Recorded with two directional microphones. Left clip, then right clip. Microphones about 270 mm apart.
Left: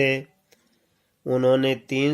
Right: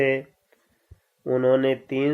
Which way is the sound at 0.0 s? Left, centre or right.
Left.